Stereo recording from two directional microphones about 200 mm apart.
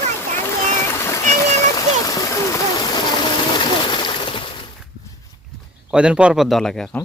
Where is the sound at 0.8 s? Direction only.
15° left (ahead or behind).